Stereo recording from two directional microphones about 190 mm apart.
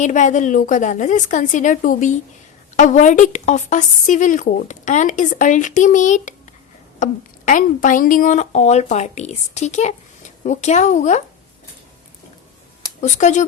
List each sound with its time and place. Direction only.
0.0 s a woman's voice: 40° left (ahead or behind)
13.0 s a woman's voice: 40° left (ahead or behind)